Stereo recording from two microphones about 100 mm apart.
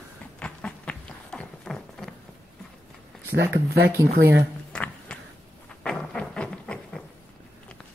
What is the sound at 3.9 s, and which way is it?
Speech, 25° right (ahead or behind).